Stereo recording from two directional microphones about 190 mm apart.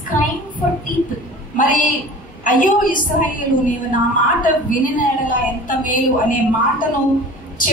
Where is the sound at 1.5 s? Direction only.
45° left (ahead or behind).